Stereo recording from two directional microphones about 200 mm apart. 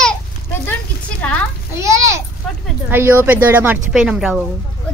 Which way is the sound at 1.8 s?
15° right (ahead or behind).